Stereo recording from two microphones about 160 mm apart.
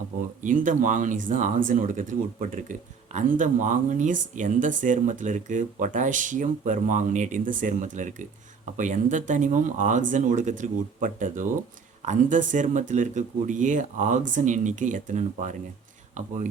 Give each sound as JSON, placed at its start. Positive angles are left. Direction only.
{"t": 0.4, "sound": "speech", "side_deg": -55}